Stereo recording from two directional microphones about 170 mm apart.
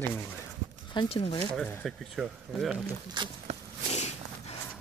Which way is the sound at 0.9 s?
35° left (ahead or behind).